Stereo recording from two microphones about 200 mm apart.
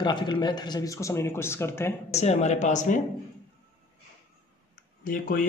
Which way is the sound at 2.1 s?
35° left (ahead or behind).